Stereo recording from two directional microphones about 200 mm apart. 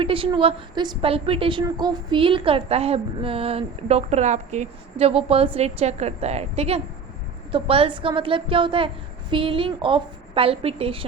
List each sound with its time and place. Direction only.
0.0 s a woman's voice: 25° right (ahead or behind)